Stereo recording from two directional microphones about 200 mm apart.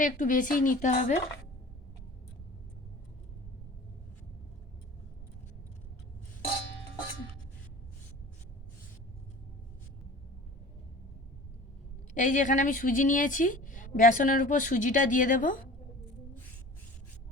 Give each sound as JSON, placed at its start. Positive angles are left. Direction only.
{"t": 0.0, "sound": "a woman's voice", "side_deg": 40}
{"t": 12.1, "sound": "a woman's voice", "side_deg": 40}